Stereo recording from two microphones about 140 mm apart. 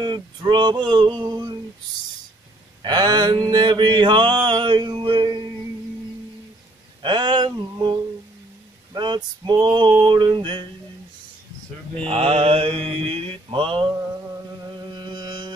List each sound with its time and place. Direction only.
0.0 s mantra: 30° right (ahead or behind)
2.8 s mantra: 30° right (ahead or behind)
7.0 s mantra: 35° right (ahead or behind)
12.1 s mantra: 45° right (ahead or behind)
14.9 s carnatic music: 30° right (ahead or behind)